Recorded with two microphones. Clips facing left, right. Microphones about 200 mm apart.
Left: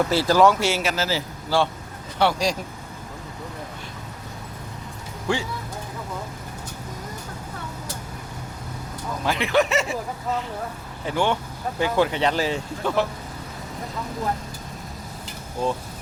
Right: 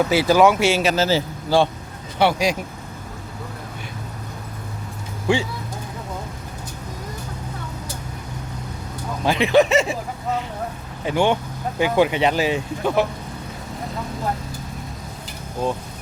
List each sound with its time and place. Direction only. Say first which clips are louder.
0.1 s speech: right 3 dB; 5° right (ahead or behind)
0.3 s speech: right 1 dB; 20° right (ahead or behind)
9.2 s speech: right 5 dB; 20° right (ahead or behind)
11.0 s speech: right 4 dB; 20° right (ahead or behind)